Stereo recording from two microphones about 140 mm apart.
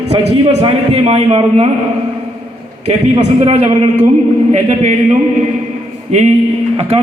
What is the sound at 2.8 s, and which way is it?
Speech, 50° right (ahead or behind).